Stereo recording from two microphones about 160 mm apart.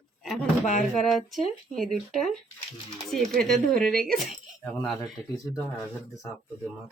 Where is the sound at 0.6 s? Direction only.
50° left (ahead or behind).